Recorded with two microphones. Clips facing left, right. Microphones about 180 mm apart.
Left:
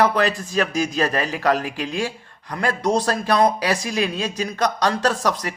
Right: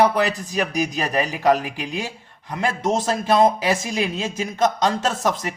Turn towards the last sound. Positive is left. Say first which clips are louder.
# left 1 dB
turn(degrees=-20)  # may be behind; listen again after turning